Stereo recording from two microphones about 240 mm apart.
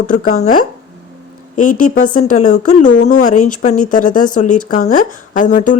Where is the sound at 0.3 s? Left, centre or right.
Left.